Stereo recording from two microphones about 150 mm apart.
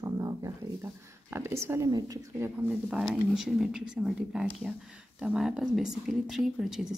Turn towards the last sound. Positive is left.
turn(degrees=0)  # may be behind; listen again after turning